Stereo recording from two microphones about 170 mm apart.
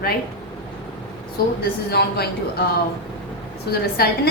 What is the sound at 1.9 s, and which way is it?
Speech, 70° left (ahead or behind).